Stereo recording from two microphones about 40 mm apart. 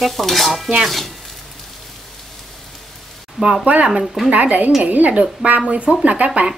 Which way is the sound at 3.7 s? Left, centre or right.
Right.